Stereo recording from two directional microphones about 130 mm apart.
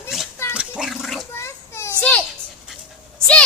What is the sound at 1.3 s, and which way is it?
Children playing, 20° left (ahead or behind).